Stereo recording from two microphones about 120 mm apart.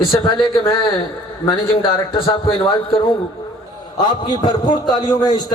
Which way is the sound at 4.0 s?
40° left (ahead or behind).